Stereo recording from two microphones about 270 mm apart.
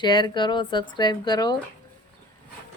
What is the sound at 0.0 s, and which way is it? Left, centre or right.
Speech, centre.